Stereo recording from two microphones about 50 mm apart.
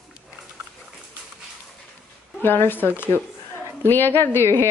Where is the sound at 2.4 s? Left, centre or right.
Left.